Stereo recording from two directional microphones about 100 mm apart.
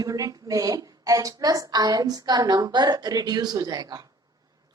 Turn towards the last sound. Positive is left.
turn(degrees=-40)  # may be behind; listen again after turning